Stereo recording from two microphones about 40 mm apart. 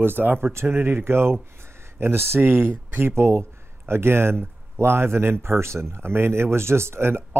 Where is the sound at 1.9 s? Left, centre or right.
Right.